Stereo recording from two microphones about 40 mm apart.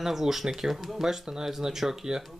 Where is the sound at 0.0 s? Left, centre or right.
Centre.